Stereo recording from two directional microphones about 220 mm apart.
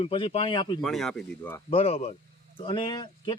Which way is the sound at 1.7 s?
25° left (ahead or behind).